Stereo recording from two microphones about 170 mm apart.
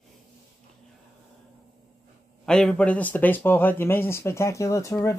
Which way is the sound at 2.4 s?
5° left (ahead or behind).